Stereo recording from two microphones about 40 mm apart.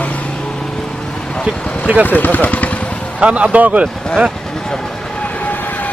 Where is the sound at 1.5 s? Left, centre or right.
Left.